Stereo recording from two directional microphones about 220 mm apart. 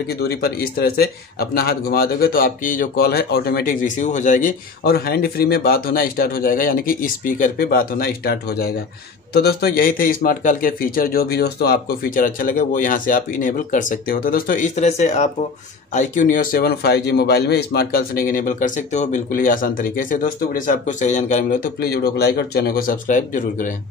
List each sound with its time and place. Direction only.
0.3 s a man's voice: 45° left (ahead or behind)